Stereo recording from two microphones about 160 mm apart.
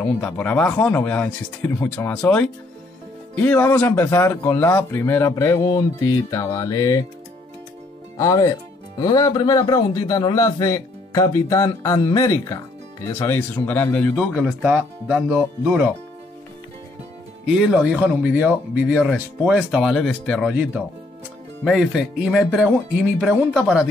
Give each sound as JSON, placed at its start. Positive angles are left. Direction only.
{"t": 0.0, "sound": "a man's voice", "side_deg": 10}
{"t": 8.2, "sound": "a man's voice", "side_deg": 20}
{"t": 14.3, "sound": "speech", "side_deg": -5}
{"t": 17.5, "sound": "speech", "side_deg": -5}
{"t": 21.6, "sound": "speech", "side_deg": 0}